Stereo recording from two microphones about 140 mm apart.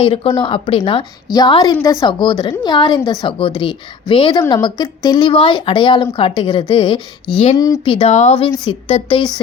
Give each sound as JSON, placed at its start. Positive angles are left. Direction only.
{"t": 0.0, "sound": "speech", "side_deg": 45}
{"t": 0.3, "sound": "a woman's voice", "side_deg": 35}
{"t": 1.3, "sound": "a woman's voice", "side_deg": 30}
{"t": 7.5, "sound": "speech", "side_deg": 25}
{"t": 7.9, "sound": "a woman's voice", "side_deg": 40}
{"t": 8.1, "sound": "a woman's voice", "side_deg": 55}